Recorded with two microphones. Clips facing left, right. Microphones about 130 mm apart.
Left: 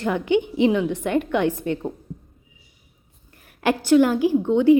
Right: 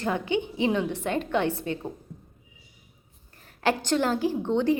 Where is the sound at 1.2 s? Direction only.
15° left (ahead or behind).